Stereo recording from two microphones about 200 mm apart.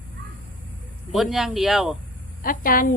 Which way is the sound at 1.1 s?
Centre (ahead or behind).